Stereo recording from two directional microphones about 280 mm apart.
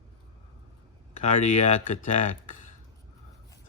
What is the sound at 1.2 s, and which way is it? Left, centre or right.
Speech, left.